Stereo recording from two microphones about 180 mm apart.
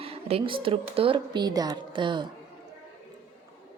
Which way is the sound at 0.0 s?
35° right (ahead or behind).